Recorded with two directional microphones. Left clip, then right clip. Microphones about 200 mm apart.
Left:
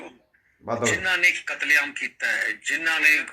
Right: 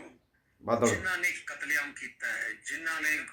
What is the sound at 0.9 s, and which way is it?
Speech, 30° left (ahead or behind).